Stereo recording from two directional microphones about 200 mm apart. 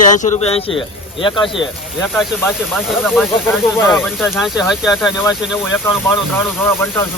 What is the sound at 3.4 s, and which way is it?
Speech, 10° left (ahead or behind).